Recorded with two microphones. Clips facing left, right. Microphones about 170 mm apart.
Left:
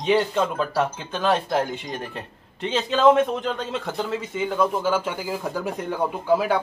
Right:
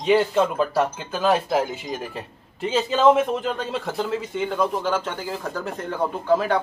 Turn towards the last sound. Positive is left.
turn(degrees=10)  # may be behind; listen again after turning